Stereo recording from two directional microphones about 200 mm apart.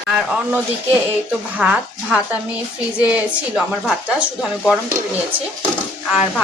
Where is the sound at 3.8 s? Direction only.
Centre (ahead or behind).